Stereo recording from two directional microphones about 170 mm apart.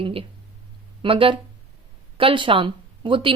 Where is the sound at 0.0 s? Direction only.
35° right (ahead or behind).